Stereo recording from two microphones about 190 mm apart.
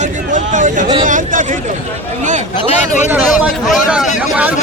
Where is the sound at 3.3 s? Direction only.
Centre (ahead or behind).